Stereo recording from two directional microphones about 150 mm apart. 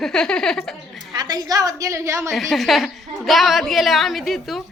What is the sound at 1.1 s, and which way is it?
A woman's voice, 25° right (ahead or behind).